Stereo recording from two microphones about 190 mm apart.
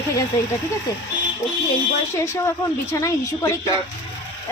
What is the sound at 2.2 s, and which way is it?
A woman's voice, 15° left (ahead or behind).